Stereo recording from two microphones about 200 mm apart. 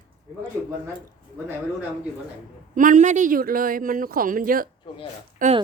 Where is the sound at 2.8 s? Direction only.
40° right (ahead or behind).